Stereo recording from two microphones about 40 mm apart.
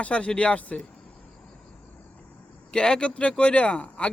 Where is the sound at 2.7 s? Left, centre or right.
Left.